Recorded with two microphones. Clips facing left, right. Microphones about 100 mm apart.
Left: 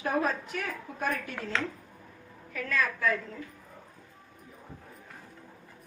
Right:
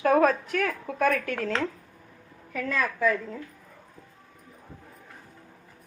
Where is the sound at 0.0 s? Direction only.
65° right (ahead or behind).